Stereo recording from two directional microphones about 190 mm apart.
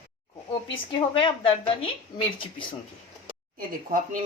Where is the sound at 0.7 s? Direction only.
25° left (ahead or behind).